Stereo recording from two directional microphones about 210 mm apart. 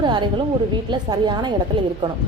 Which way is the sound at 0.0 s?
20° right (ahead or behind).